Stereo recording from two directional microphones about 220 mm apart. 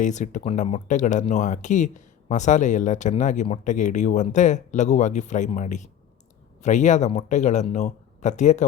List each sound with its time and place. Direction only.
0.0 s speech: 35° left (ahead or behind)